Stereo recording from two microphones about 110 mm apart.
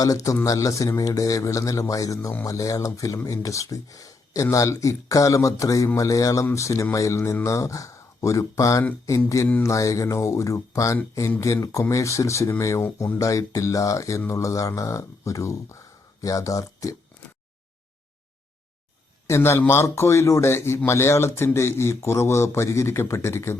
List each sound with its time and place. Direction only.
0.0 s a man's voice: 30° left (ahead or behind)
19.3 s a man's voice: 25° left (ahead or behind)